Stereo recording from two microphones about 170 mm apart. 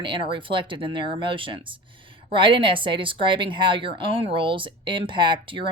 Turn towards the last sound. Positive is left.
turn(degrees=-30)  # may be behind; listen again after turning